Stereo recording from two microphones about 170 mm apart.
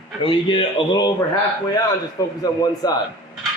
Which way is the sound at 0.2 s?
30° left (ahead or behind).